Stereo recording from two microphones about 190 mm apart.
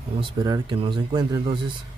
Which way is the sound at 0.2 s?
25° right (ahead or behind).